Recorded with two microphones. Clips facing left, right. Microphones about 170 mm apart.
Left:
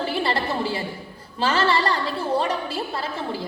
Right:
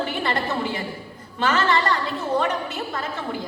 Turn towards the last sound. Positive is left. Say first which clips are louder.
# even
turn(degrees=30)  # may be behind; listen again after turning